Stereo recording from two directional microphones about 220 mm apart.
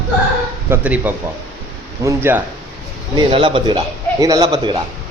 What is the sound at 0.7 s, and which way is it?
A man's voice, 5° right (ahead or behind).